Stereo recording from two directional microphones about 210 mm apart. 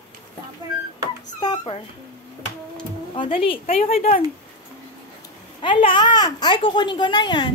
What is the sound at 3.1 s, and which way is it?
A child's voice, 25° left (ahead or behind).